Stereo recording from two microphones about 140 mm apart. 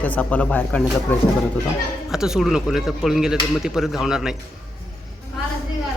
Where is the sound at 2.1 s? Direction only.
5° right (ahead or behind).